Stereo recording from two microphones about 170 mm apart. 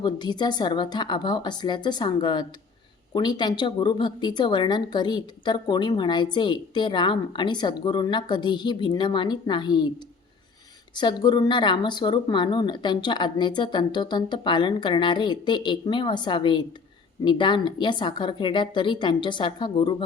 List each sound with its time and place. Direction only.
0.0 s speech: 25° left (ahead or behind)
10.9 s speech: 25° left (ahead or behind)